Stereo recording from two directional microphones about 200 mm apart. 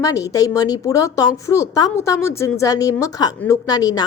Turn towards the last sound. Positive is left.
turn(degrees=20)  # may be behind; listen again after turning